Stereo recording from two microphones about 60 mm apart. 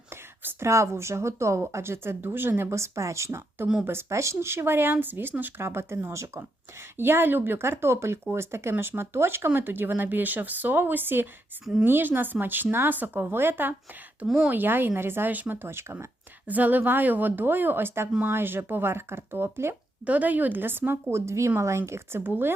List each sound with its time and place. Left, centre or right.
0.1 s speech: right
2.6 s speech: right
6.9 s speech: right
14.3 s speech: centre
14.5 s speech: right
16.5 s speech: right
20.1 s speech: right
22.2 s speech: right